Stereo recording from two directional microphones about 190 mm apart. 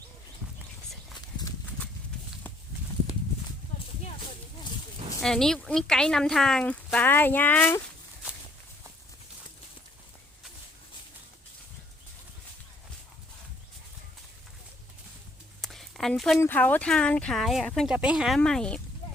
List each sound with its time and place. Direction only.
1.2 s horse: 20° left (ahead or behind)
5.2 s speech: 5° left (ahead or behind)
15.6 s a sound: centre (ahead or behind)
16.4 s speech: 10° left (ahead or behind)